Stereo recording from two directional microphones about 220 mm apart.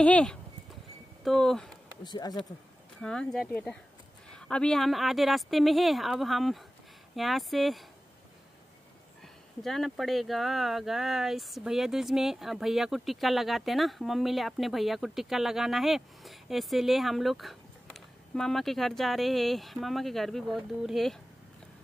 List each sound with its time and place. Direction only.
0.0 s speech: 5° left (ahead or behind)
2.0 s speech: 20° left (ahead or behind)
3.0 s speech: 5° left (ahead or behind)
9.2 s speech: centre (ahead or behind)